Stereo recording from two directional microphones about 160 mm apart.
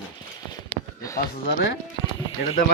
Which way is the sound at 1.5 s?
90° left.